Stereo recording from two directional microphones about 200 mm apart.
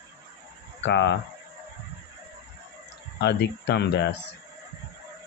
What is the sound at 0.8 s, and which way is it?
Speech, 60° left (ahead or behind).